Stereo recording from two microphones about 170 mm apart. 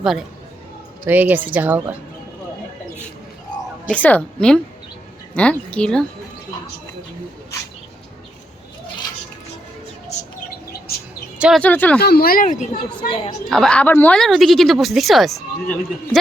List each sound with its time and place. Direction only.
0.0 s speech: centre (ahead or behind)
3.8 s a woman's voice: 10° left (ahead or behind)
11.3 s speech: 5° right (ahead or behind)
11.6 s a woman's voice: 10° left (ahead or behind)
11.9 s speech: 65° left (ahead or behind); by 12.6 s 50° left (ahead or behind)
13.0 s a woman's voice: 35° left (ahead or behind)
13.5 s speech: 5° left (ahead or behind)